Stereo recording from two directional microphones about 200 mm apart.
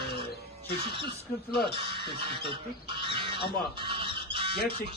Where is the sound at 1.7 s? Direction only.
25° right (ahead or behind).